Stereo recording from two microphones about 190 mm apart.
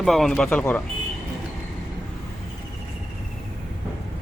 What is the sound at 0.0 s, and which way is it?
Speech, centre (ahead or behind).